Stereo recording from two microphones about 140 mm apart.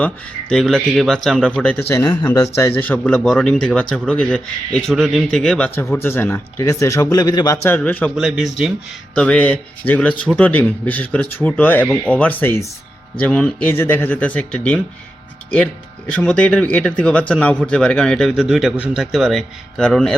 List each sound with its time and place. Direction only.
0.0 s speech: 5° left (ahead or behind)
8.1 s speech: centre (ahead or behind)